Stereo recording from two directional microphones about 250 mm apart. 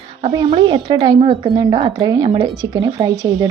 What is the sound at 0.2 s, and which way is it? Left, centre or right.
Speech, right.